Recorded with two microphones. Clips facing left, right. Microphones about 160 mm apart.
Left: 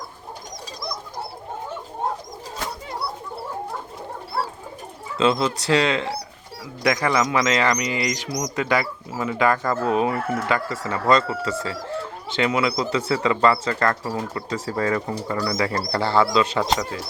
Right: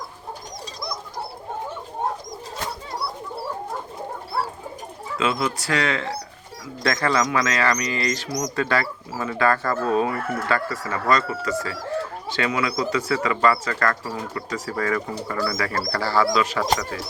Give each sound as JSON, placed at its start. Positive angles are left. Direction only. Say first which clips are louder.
{"t": 5.1, "sound": "speech", "louder": "left 4 dB", "side_deg": 30}